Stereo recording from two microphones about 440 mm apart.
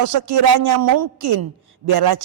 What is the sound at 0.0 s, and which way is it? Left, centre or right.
A man's voice, right.